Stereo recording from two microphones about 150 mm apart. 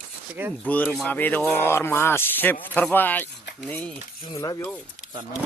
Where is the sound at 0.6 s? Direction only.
10° left (ahead or behind).